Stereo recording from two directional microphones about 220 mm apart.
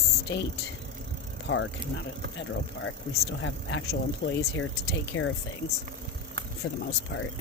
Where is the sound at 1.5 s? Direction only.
55° left (ahead or behind).